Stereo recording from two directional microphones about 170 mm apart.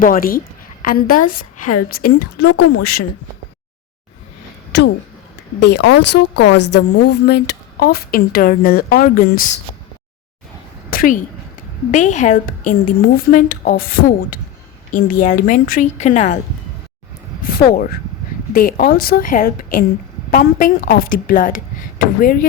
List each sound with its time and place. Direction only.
0.0 s a woman's voice: 55° left (ahead or behind)
4.7 s a woman's voice: 90° left; by 9.6 s 55° left (ahead or behind)
10.9 s a woman's voice: 55° left (ahead or behind)
18.5 s speech: 60° left (ahead or behind)